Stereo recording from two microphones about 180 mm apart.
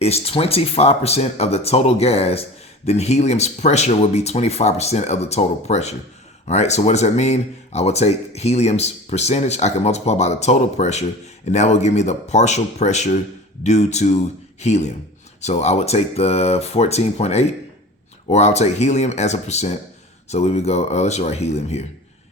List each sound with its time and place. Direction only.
0.0 s speech: 35° left (ahead or behind)